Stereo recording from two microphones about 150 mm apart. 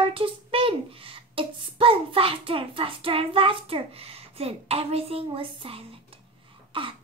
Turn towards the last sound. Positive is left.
turn(degrees=-35)  # may be behind; listen again after turning